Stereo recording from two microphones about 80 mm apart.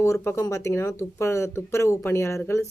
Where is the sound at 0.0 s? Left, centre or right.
Left.